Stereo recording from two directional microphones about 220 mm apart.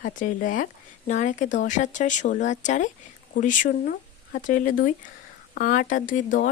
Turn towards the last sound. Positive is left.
turn(degrees=35)  # may be behind; listen again after turning